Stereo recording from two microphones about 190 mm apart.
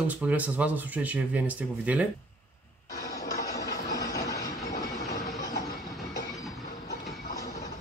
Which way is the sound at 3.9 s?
15° left (ahead or behind).